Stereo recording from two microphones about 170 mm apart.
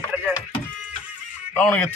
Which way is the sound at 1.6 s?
5° left (ahead or behind).